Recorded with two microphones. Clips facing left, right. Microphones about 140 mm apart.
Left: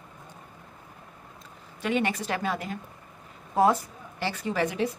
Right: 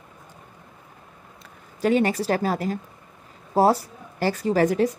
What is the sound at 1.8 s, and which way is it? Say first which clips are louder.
A woman's voice: right 7 dB; 35° right (ahead or behind).